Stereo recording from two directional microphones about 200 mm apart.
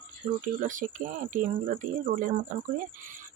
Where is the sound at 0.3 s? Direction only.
40° right (ahead or behind).